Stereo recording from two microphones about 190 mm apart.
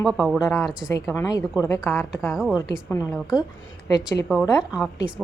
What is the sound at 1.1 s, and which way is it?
Speech, 15° left (ahead or behind).